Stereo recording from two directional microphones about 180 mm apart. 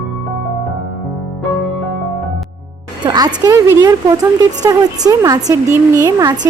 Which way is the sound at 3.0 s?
20° right (ahead or behind).